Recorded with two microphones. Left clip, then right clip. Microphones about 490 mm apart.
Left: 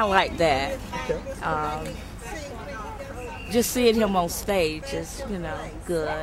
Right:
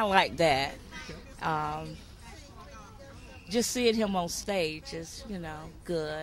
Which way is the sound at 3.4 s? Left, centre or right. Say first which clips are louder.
Left 6 dB; right.